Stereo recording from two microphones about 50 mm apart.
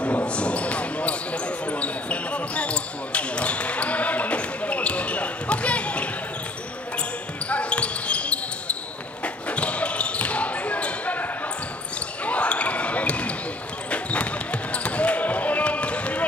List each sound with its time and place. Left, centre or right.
0.0 s basketball bounce: left
7.4 s basketball bounce: left
12.3 s basketball bounce: left